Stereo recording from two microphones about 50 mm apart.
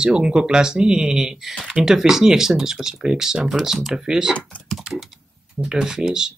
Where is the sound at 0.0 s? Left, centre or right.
Centre.